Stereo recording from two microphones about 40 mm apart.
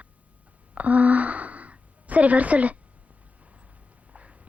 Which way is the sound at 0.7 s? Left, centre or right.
Right.